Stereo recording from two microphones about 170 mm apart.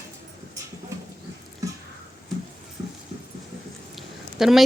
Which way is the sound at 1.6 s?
20° right (ahead or behind).